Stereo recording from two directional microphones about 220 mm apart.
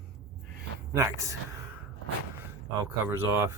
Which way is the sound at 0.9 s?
15° right (ahead or behind).